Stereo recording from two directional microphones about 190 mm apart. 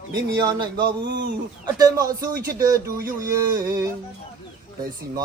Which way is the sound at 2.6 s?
15° right (ahead or behind).